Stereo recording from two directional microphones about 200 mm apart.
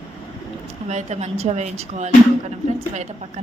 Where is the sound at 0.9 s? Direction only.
35° right (ahead or behind).